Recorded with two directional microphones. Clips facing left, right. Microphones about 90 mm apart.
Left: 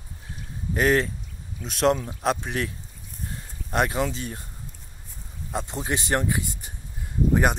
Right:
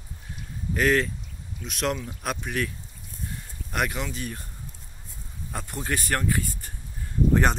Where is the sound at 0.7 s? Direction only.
30° left (ahead or behind).